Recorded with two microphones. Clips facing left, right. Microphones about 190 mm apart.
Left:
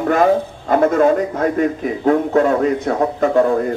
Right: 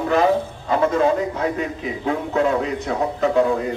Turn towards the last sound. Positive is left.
turn(degrees=50)  # may be behind; listen again after turning